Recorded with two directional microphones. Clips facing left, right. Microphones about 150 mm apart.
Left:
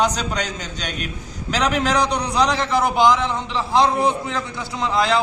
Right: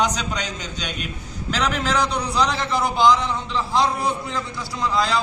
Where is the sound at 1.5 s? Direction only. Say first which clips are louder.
Left 3 dB; 15° left (ahead or behind).